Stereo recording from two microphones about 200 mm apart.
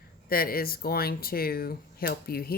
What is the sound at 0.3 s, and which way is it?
Speech, 45° left (ahead or behind).